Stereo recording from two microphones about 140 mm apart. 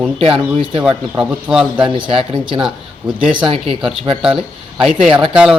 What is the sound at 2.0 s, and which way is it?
Speech, 40° right (ahead or behind).